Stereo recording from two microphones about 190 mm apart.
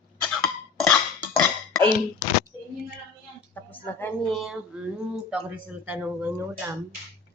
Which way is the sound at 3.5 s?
10° left (ahead or behind).